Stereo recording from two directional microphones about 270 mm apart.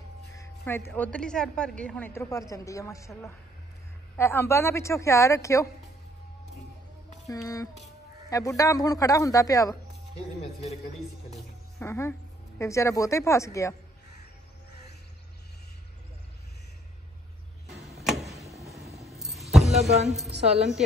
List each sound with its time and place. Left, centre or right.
0.4 s a woman's voice: centre
7.2 s a woman's voice: centre
11.8 s a woman's voice: centre
17.6 s arrow: centre
18.9 s keys jangling: centre
19.7 s music: right
20.3 s a woman's voice: right